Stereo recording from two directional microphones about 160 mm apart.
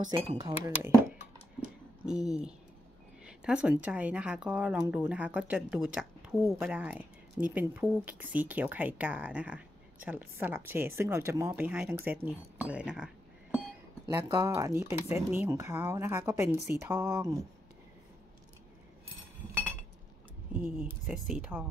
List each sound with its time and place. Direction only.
1.6 s a sound: 5° right (ahead or behind)
3.3 s speech: 5° right (ahead or behind)
14.1 s speech: 20° right (ahead or behind)
19.5 s chink: 10° right (ahead or behind)
20.5 s speech: 10° right (ahead or behind)